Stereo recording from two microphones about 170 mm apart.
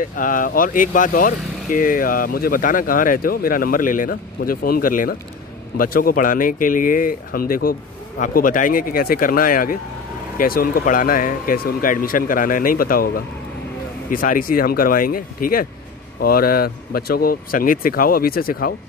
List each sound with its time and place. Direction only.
0.0 s speech: 55° left (ahead or behind)